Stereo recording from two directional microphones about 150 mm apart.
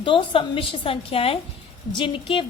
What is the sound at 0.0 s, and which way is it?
A woman's voice, 35° left (ahead or behind).